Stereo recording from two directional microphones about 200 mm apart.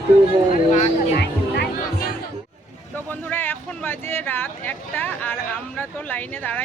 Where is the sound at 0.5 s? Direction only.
35° left (ahead or behind).